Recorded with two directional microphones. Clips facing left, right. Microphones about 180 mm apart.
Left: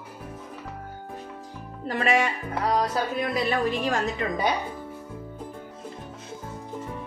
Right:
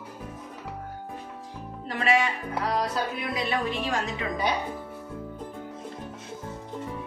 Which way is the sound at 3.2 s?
45° left (ahead or behind).